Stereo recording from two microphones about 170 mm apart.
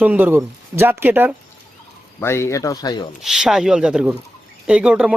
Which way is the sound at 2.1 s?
15° left (ahead or behind).